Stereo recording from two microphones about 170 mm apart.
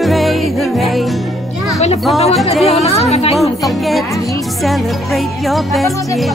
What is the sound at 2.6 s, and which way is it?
Speech, 35° left (ahead or behind).